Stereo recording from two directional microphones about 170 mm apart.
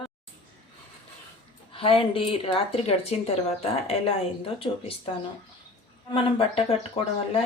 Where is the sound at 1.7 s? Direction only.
30° left (ahead or behind).